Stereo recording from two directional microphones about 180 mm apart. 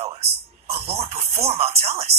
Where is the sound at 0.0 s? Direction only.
35° right (ahead or behind).